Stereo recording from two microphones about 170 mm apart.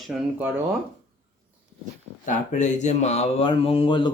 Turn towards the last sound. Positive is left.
turn(degrees=30)  # may be behind; listen again after turning